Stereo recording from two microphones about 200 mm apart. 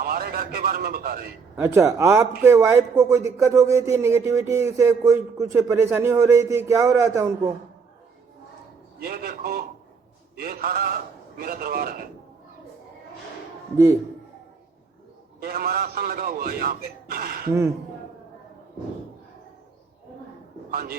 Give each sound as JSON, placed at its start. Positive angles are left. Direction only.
{"t": 0.0, "sound": "a man's voice", "side_deg": -50}
{"t": 1.5, "sound": "speech", "side_deg": -15}
{"t": 9.0, "sound": "a man's voice", "side_deg": -50}
{"t": 15.4, "sound": "a man's voice", "side_deg": -50}
{"t": 20.7, "sound": "a man's voice", "side_deg": -45}